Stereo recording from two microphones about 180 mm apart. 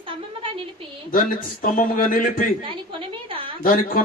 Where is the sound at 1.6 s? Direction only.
50° left (ahead or behind).